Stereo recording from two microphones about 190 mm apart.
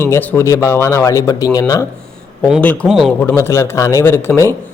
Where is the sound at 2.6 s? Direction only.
5° left (ahead or behind).